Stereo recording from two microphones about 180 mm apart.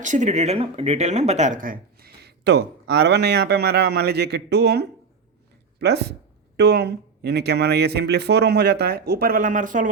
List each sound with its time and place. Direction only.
0.0 s speech: 45° right (ahead or behind)